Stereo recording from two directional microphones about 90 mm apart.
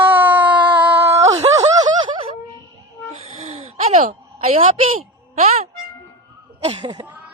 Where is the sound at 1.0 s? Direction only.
35° right (ahead or behind).